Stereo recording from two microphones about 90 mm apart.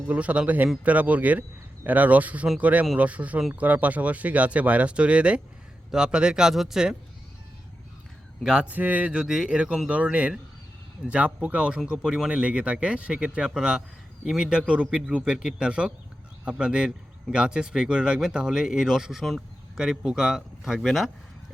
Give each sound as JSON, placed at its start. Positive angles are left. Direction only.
{"t": 0.0, "sound": "speech", "side_deg": -15}
{"t": 8.4, "sound": "speech", "side_deg": -15}